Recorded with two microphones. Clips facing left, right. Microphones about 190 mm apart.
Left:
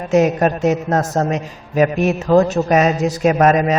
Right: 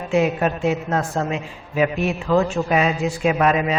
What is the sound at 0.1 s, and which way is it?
Music, 45° left (ahead or behind).